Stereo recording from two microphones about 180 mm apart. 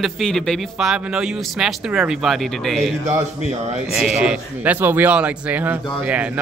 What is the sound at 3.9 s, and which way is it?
A man's voice, 5° right (ahead or behind).